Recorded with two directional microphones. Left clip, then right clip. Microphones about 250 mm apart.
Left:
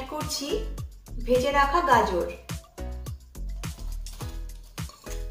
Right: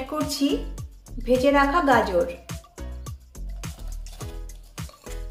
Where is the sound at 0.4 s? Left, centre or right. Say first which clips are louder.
Right 5 dB; right.